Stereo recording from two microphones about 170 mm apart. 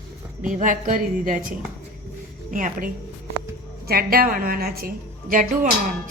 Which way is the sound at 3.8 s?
65° right (ahead or behind).